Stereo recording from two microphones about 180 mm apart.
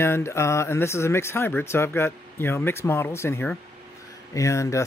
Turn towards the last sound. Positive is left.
turn(degrees=15)  # may be behind; listen again after turning